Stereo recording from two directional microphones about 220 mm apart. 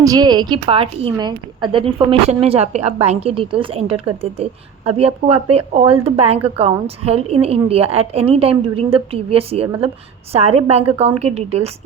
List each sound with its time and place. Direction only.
0.0 s a woman's voice: 15° right (ahead or behind)